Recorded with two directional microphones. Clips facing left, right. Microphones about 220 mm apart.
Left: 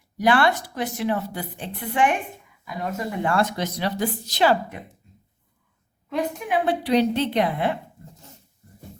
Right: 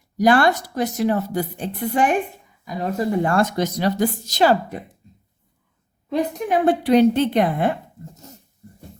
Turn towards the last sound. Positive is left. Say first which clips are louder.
# right 4 dB
turn(degrees=-50)  # may be behind; listen again after turning